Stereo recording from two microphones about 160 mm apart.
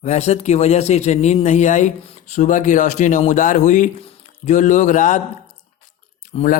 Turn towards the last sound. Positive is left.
turn(degrees=45)  # may be behind; listen again after turning